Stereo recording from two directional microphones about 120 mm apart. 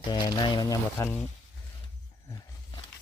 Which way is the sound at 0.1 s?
35° left (ahead or behind).